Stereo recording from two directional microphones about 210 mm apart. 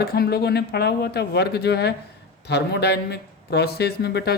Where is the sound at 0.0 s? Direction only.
50° left (ahead or behind).